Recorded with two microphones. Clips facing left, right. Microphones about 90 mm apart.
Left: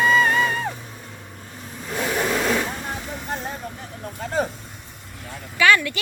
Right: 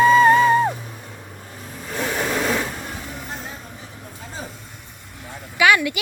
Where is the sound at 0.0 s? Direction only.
30° right (ahead or behind).